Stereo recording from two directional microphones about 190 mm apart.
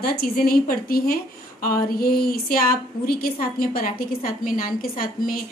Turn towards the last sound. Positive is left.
turn(degrees=50)  # may be behind; listen again after turning